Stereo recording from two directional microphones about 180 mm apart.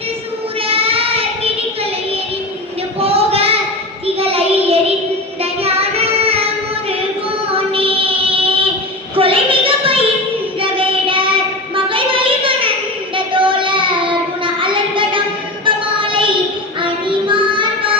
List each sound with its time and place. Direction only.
0.7 s child singing: 30° right (ahead or behind)
3.0 s a sound: 35° right (ahead or behind)
4.0 s child singing: 35° right (ahead or behind)
7.5 s child singing: 30° right (ahead or behind)
9.1 s a sound: 30° right (ahead or behind)
10.6 s child singing: 30° right (ahead or behind)